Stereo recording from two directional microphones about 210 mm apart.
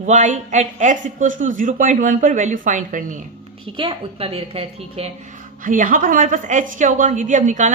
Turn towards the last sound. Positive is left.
turn(degrees=-35)  # may be behind; listen again after turning